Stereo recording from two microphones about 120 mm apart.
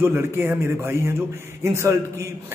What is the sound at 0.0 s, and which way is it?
A man's voice, 20° right (ahead or behind).